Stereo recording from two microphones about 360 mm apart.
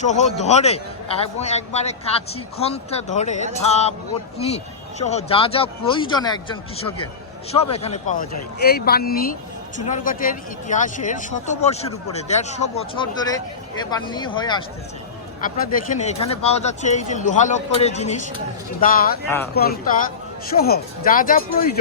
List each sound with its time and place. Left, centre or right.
0.0 s a man's voice: centre